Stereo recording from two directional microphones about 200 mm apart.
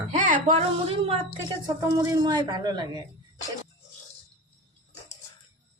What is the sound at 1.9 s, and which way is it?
Speech, 20° right (ahead or behind).